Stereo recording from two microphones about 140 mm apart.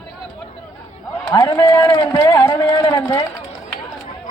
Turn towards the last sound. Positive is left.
turn(degrees=25)  # may be behind; listen again after turning